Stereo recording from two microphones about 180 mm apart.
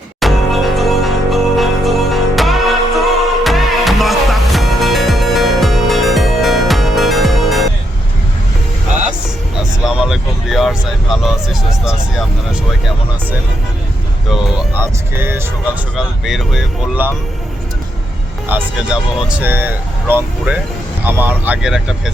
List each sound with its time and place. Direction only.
0.2 s music: centre (ahead or behind)
9.8 s vehicle: centre (ahead or behind)
14.8 s speech: 15° right (ahead or behind)
16.0 s speech: centre (ahead or behind)
18.4 s speech: 10° right (ahead or behind)